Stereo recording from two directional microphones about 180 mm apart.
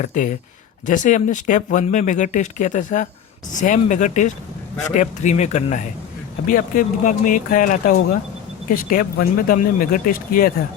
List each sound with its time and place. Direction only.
0.0 s speech: 45° left (ahead or behind)